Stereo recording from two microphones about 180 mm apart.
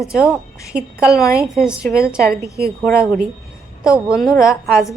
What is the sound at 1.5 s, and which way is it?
Speech, centre (ahead or behind).